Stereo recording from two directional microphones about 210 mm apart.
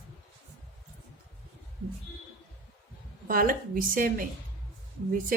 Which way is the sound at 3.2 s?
45° right (ahead or behind).